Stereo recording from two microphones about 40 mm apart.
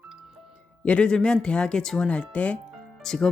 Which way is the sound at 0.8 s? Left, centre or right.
Left.